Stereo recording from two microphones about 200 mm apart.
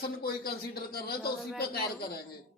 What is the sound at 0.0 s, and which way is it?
A man's voice, 50° left (ahead or behind).